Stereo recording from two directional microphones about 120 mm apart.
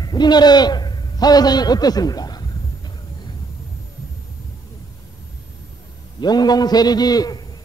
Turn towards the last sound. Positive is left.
turn(degrees=30)  # may be behind; listen again after turning